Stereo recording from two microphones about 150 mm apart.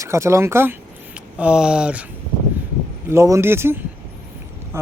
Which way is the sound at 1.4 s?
5° right (ahead or behind).